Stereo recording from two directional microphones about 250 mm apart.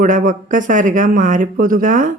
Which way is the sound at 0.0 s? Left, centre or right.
Right.